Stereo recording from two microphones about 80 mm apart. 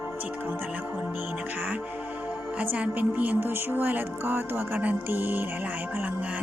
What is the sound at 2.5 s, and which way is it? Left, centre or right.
Speech, centre.